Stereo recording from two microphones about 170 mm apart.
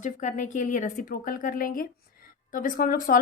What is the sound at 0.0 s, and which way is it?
A woman's voice, 45° left (ahead or behind).